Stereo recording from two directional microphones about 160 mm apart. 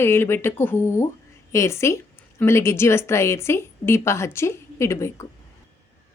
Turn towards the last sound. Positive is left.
turn(degrees=15)  # may be behind; listen again after turning